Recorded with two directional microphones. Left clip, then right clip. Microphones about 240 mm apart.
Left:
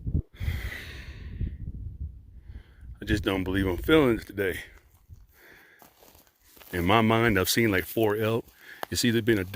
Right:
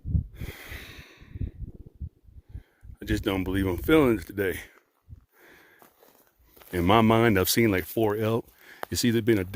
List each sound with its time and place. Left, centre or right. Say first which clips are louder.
0.3 s snort: left 3 dB; right
3.0 s speech: left 1 dB; right
5.4 s a sound: left 1 dB; right
6.7 s speech: right 2 dB; right